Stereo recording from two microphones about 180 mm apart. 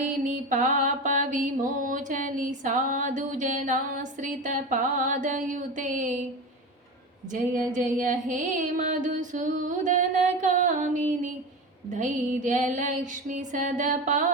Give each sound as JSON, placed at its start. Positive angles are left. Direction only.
{"t": 0.0, "sound": "music", "side_deg": -45}
{"t": 7.3, "sound": "music", "side_deg": -45}